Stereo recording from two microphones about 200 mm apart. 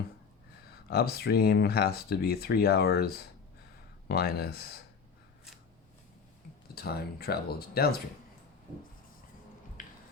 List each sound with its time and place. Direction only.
0.9 s speech: 50° left (ahead or behind)
6.7 s speech: 50° left (ahead or behind)
9.8 s music: 45° left (ahead or behind)